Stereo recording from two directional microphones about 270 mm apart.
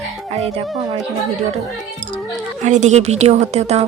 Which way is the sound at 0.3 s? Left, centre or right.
Right.